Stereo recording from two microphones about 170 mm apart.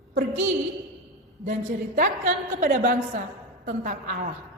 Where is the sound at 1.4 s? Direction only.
50° right (ahead or behind).